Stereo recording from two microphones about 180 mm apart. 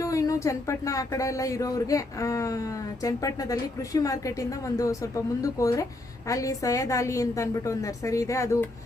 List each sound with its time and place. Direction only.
0.0 s speech: 20° left (ahead or behind)